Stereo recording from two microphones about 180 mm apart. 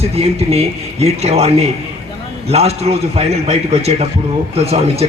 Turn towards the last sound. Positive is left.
turn(degrees=-35)  # may be behind; listen again after turning